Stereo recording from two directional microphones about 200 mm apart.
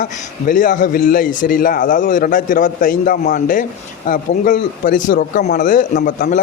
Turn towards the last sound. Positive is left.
turn(degrees=40)  # may be behind; listen again after turning